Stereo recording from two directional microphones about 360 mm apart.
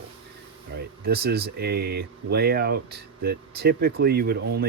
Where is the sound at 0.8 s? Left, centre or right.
Right.